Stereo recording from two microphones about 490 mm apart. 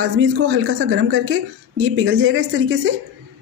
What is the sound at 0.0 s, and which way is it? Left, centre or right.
A woman's voice, right.